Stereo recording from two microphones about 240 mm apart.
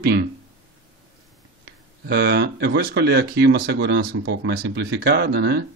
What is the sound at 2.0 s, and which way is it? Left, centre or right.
Speech, right.